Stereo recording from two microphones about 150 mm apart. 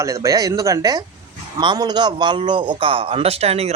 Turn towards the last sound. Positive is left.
turn(degrees=-45)  # may be behind; listen again after turning